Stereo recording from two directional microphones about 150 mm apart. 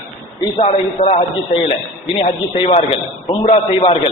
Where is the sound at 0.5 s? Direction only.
40° left (ahead or behind).